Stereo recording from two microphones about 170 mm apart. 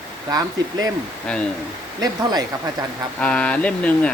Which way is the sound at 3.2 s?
5° left (ahead or behind).